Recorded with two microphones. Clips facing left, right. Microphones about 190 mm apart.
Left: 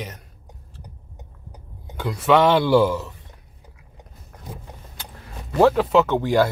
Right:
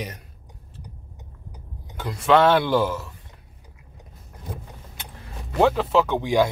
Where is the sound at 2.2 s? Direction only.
10° left (ahead or behind).